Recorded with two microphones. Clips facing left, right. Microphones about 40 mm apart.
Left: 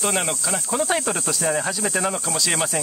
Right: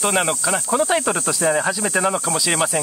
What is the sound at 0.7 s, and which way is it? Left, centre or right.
Speech, centre.